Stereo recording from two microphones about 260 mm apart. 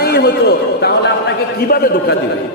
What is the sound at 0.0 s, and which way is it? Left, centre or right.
A man's voice, left.